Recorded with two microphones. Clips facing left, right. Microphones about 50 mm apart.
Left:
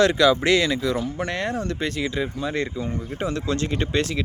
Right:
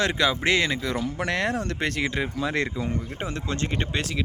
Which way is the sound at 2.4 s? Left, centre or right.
Right.